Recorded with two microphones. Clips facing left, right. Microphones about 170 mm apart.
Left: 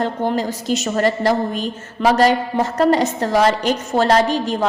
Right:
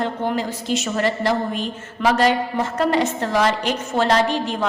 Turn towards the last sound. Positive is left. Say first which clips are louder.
# left 3 dB
turn(degrees=40)  # may be behind; listen again after turning